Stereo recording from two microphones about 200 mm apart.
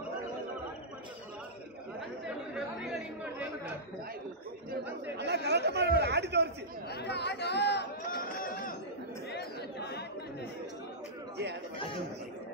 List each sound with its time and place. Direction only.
2.2 s chatter: centre (ahead or behind)
5.1 s chatter: 55° right (ahead or behind)
6.9 s chatter: 55° left (ahead or behind)